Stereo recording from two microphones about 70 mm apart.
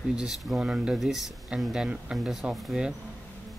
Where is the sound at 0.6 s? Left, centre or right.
Centre.